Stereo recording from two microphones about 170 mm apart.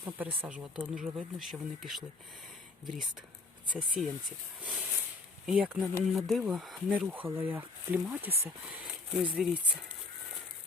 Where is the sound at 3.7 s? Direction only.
5° right (ahead or behind).